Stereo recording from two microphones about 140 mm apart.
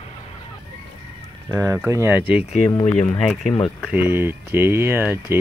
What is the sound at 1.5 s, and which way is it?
Speech, 20° right (ahead or behind).